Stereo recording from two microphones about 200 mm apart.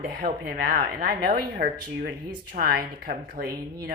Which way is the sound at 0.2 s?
50° right (ahead or behind).